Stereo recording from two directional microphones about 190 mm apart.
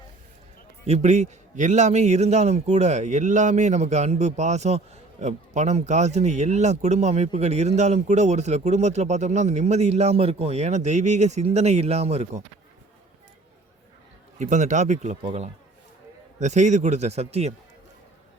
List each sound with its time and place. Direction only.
0.9 s speech: 35° right (ahead or behind)
14.3 s speech: 40° right (ahead or behind)